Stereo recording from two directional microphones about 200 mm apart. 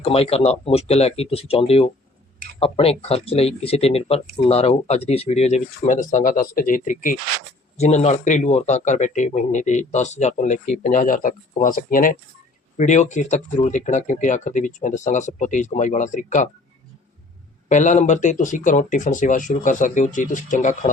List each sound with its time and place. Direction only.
0.0 s speech: 30° left (ahead or behind)
17.7 s speech: 35° left (ahead or behind)